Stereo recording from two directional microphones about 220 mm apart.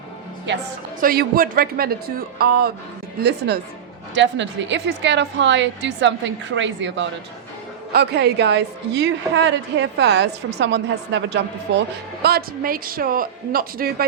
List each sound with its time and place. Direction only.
1.0 s a woman's voice: 40° right (ahead or behind)
12.2 s a woman's voice: 45° right (ahead or behind)